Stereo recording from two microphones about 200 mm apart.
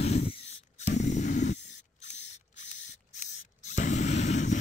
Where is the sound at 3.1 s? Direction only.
35° left (ahead or behind).